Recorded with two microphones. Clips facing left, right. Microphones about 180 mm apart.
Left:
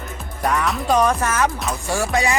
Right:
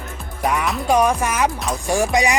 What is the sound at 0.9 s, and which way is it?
Music, 10° right (ahead or behind).